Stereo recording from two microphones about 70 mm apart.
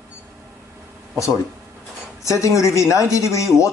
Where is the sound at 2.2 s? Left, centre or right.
Left.